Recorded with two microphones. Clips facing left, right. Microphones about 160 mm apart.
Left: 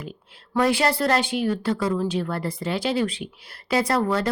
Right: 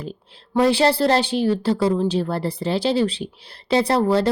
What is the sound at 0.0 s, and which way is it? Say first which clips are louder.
A woman's voice: right 4 dB; 30° right (ahead or behind).